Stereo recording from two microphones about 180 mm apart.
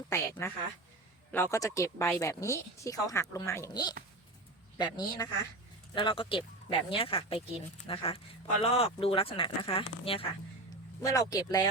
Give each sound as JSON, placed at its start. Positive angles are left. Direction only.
{"t": 0.1, "sound": "speech", "side_deg": 15}
{"t": 11.0, "sound": "speech", "side_deg": 20}